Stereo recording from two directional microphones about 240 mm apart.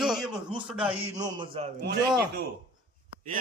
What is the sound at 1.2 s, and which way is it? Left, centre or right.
Speech, centre.